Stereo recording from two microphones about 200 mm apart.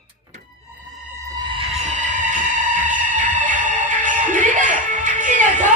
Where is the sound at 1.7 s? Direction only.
35° right (ahead or behind).